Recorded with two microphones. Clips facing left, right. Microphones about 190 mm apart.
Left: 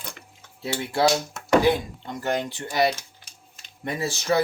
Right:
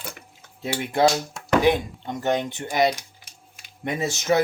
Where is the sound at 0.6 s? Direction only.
20° right (ahead or behind).